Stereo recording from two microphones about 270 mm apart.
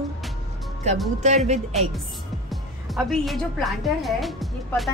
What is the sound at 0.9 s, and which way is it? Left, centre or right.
Speech, right.